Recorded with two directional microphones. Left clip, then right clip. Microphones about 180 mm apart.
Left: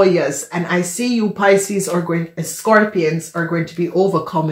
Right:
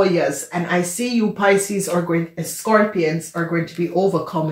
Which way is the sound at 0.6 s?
35° left (ahead or behind).